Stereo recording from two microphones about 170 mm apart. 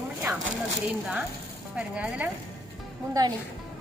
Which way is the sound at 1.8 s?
5° right (ahead or behind).